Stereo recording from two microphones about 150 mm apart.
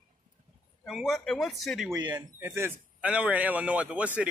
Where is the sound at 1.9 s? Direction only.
25° right (ahead or behind).